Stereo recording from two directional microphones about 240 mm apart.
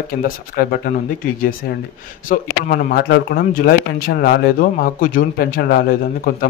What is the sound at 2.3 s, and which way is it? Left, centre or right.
Speech, left.